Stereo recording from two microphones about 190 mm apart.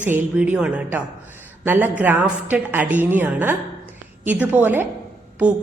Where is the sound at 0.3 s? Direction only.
5° right (ahead or behind).